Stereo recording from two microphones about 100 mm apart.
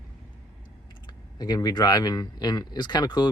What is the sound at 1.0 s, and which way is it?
Speech, 45° left (ahead or behind).